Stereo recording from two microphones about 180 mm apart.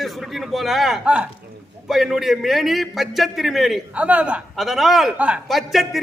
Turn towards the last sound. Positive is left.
turn(degrees=0)  # may be behind; listen again after turning